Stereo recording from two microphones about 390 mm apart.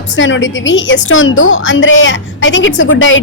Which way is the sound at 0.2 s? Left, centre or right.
Left.